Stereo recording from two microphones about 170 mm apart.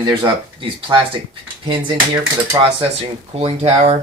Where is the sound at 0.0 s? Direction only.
30° right (ahead or behind).